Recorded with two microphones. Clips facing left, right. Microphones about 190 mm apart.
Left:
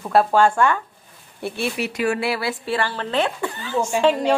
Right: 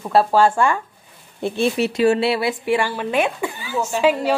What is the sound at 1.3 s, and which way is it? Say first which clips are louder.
A woman's voice: right 6 dB; 20° right (ahead or behind).